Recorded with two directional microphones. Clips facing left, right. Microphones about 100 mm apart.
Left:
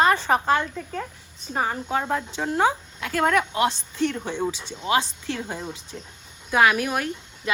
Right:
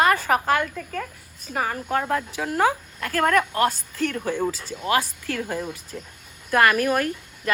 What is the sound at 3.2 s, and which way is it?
Speech, centre (ahead or behind).